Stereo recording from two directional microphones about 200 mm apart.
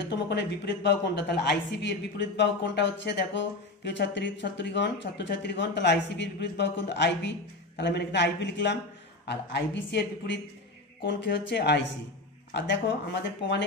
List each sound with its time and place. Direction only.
0.1 s speech: 60° left (ahead or behind)